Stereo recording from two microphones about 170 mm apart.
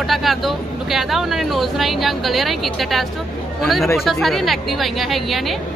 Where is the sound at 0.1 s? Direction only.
Centre (ahead or behind).